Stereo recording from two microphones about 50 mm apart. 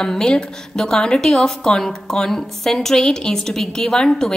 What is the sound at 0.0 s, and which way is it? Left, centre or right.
A woman's voice, centre.